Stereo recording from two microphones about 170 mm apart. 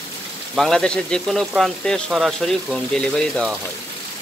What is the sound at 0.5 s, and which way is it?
Speech, 5° left (ahead or behind).